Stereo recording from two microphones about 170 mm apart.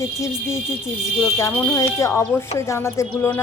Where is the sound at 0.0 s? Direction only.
15° left (ahead or behind).